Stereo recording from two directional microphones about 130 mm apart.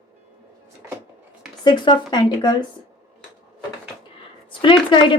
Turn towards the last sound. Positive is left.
turn(degrees=40)  # may be behind; listen again after turning